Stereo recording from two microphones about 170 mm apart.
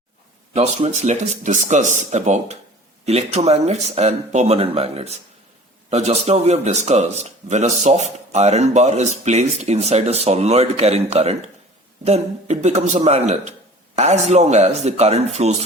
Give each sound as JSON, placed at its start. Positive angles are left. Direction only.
{"t": 0.5, "sound": "speech", "side_deg": -40}